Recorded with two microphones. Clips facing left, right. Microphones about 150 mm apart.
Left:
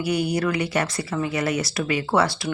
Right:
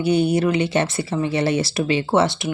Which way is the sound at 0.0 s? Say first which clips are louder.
Right 5 dB; 25° right (ahead or behind).